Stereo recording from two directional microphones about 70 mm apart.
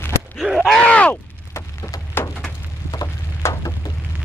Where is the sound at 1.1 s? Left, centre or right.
Left.